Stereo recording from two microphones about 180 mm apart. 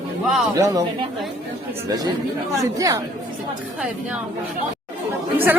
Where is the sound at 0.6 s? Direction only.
20° right (ahead or behind).